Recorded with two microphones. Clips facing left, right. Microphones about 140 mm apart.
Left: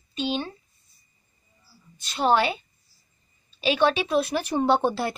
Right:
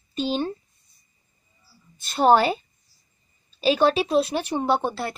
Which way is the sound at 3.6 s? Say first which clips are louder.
Right 3 dB; 35° right (ahead or behind).